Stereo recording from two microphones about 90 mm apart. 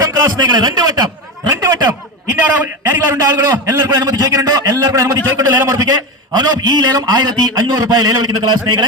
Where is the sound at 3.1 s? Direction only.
40° right (ahead or behind).